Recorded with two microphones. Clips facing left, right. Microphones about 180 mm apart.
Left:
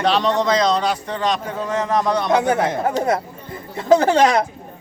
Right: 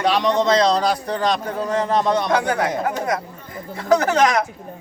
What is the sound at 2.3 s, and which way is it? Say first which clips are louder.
Speech: left 2 dB; 20° left (ahead or behind).